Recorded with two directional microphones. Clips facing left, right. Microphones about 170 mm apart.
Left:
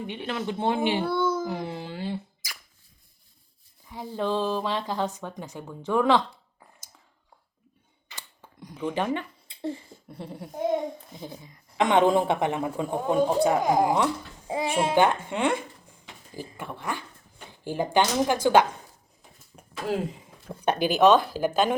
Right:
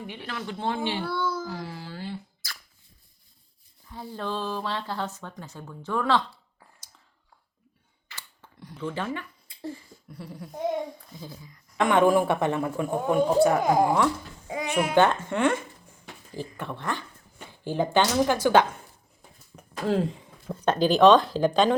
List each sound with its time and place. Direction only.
0.1 s speech: 20° left (ahead or behind)
3.8 s speech: 15° left (ahead or behind)
8.0 s a sound: 15° left (ahead or behind)
10.9 s a woman's voice: 20° left (ahead or behind)
14.4 s a child's voice: 30° left (ahead or behind)
14.9 s music: 15° left (ahead or behind)
16.6 s speech: 10° left (ahead or behind)
20.5 s speech: 10° left (ahead or behind)